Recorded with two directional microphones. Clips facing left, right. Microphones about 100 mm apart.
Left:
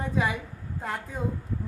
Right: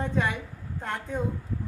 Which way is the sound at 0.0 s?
5° left (ahead or behind).